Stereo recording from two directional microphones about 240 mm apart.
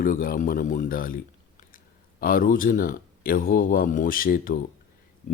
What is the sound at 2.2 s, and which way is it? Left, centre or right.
Speech, left.